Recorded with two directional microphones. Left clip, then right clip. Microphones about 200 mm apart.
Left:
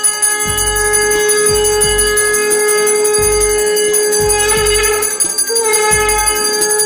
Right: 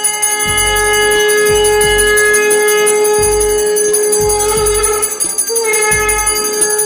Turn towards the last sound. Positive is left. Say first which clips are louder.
# even
turn(degrees=10)  # may be behind; listen again after turning